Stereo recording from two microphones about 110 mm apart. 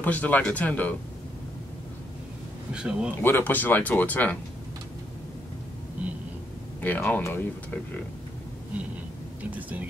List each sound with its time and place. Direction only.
0.0 s speech: 15° left (ahead or behind)
2.7 s speech: 10° right (ahead or behind)
3.2 s speech: 20° left (ahead or behind)
6.8 s speech: 15° left (ahead or behind)
9.6 s speech: 15° right (ahead or behind)